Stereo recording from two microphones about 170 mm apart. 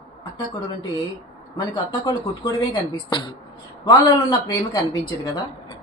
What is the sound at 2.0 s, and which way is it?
Speech, 25° left (ahead or behind).